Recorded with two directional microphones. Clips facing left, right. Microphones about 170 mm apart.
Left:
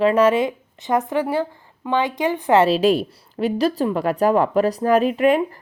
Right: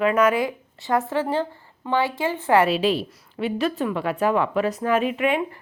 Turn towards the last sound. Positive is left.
turn(degrees=35)  # may be behind; listen again after turning